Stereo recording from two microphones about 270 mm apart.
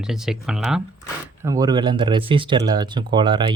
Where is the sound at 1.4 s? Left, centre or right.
Centre.